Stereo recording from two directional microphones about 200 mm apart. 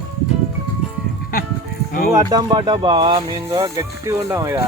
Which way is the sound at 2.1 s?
20° right (ahead or behind).